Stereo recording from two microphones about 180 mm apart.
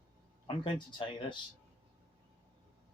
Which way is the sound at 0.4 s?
25° left (ahead or behind).